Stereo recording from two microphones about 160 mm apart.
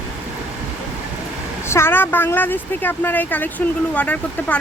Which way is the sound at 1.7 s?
15° left (ahead or behind).